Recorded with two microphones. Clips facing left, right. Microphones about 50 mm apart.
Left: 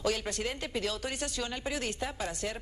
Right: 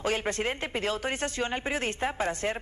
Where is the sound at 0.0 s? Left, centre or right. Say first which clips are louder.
Right 4 dB; right.